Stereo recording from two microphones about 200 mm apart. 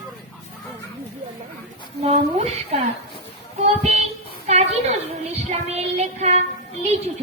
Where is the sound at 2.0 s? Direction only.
35° right (ahead or behind).